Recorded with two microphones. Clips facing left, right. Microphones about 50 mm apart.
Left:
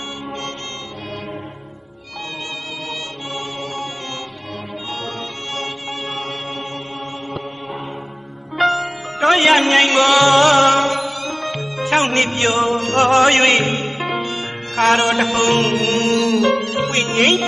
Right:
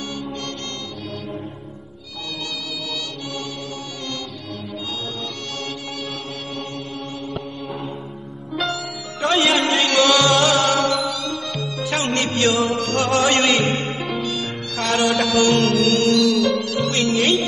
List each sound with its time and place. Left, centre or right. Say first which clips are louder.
8.7 s music: left 6 dB; left
9.5 s a man's voice: left 6 dB; left
9.8 s music: left 3 dB; left
13.9 s music: left 3 dB; left
14.2 s music: left 1 dB; left